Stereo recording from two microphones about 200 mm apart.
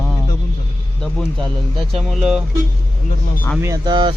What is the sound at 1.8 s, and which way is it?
Speech, centre (ahead or behind).